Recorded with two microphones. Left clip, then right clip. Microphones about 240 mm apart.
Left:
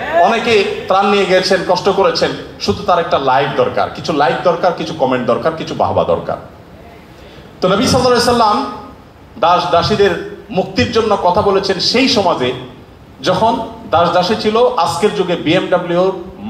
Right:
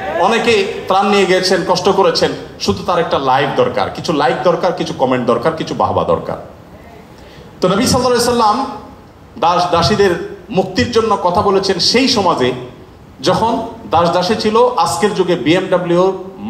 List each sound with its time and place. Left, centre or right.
0.2 s a man's voice: right
7.6 s a man's voice: right